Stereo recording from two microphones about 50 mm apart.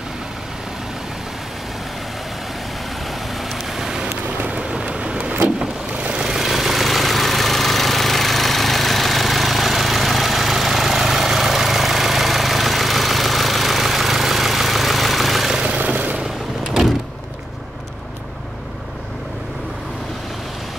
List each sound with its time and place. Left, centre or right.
3.3 s vehicle: centre
15.6 s vehicle: right